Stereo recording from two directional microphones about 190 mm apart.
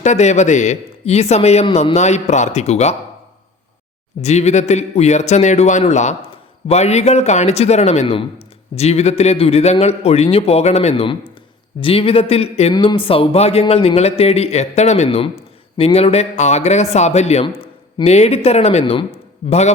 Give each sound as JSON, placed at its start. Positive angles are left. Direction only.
{"t": 0.0, "sound": "speech", "side_deg": 40}
{"t": 4.2, "sound": "speech", "side_deg": 35}